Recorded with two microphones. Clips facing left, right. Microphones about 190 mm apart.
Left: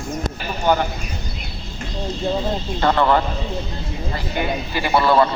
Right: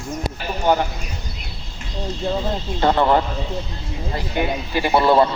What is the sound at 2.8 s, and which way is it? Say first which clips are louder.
Speech: right 1 dB; 15° right (ahead or behind).